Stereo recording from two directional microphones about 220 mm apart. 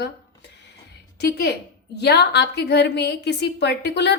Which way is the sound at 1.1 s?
50° left (ahead or behind).